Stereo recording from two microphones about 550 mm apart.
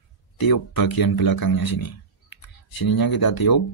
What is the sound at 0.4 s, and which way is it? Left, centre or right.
A man's voice, left.